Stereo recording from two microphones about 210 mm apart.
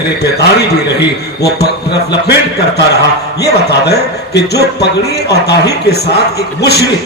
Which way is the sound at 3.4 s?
50° left (ahead or behind).